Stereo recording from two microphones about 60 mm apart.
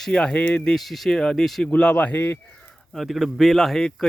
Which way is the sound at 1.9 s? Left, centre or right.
Left.